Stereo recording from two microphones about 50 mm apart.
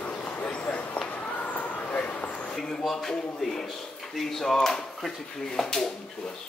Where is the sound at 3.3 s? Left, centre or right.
Centre.